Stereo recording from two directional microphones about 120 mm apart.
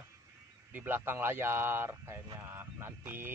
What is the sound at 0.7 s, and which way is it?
Speech, 15° right (ahead or behind).